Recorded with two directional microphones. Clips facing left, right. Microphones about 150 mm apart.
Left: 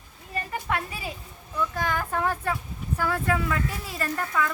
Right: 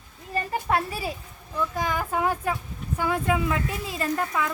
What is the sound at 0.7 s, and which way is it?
Speech, 30° right (ahead or behind).